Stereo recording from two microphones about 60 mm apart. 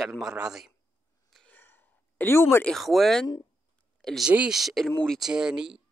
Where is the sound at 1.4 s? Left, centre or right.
Left.